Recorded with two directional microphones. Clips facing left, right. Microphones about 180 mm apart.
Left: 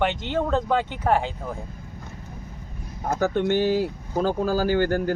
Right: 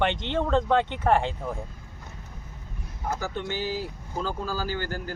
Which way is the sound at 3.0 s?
60° left (ahead or behind).